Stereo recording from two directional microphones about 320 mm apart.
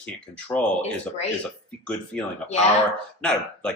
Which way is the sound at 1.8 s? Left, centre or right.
Centre.